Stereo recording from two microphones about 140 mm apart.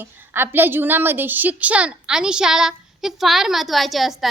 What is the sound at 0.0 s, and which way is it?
A woman's voice, 15° right (ahead or behind).